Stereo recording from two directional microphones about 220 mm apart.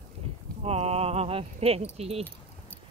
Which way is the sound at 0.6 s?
30° right (ahead or behind).